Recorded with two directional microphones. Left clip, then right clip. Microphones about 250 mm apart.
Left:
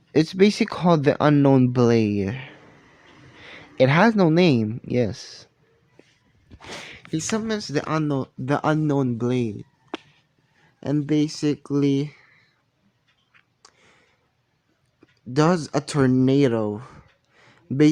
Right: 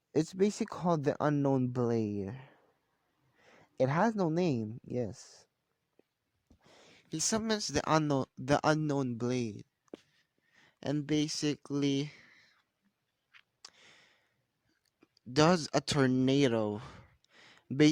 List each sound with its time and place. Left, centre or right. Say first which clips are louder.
0.1 s speech: left 12 dB; centre
3.4 s a sound: left 12 dB; centre
4.2 s speech: left 13 dB; centre
6.9 s speech: left 7 dB; right
10.8 s speech: left 10 dB; right
13.3 s duck: left 2 dB; right
15.3 s speech: left 6 dB; right